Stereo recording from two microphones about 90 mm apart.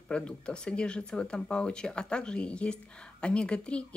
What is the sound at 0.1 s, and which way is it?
Speech, 10° left (ahead or behind).